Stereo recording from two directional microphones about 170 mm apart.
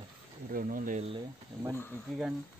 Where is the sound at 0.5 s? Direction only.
55° right (ahead or behind).